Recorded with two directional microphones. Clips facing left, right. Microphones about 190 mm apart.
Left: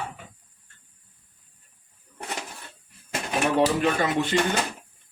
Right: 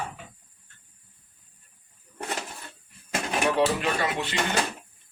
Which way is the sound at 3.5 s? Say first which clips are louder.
Left 6 dB; 45° left (ahead or behind).